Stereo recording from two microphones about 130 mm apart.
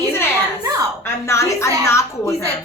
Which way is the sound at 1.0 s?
20° left (ahead or behind).